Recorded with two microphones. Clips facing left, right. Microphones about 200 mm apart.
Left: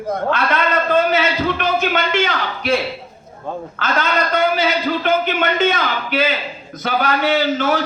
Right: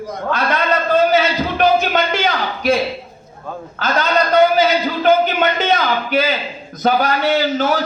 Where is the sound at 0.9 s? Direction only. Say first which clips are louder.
Right 3 dB; 35° right (ahead or behind).